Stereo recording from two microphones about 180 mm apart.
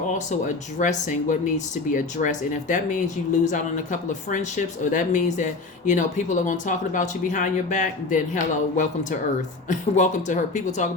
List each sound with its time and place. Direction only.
0.1 s speech: 45° left (ahead or behind)